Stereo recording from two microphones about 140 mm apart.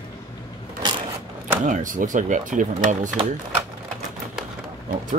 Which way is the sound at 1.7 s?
65° right (ahead or behind).